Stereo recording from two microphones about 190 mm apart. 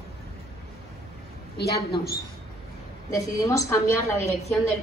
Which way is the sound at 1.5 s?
55° left (ahead or behind).